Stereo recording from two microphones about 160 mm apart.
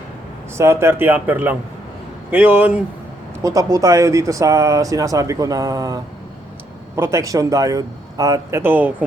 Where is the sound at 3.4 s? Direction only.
20° right (ahead or behind).